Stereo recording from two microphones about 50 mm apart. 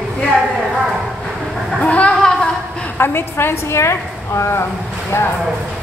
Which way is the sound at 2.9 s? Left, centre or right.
Left.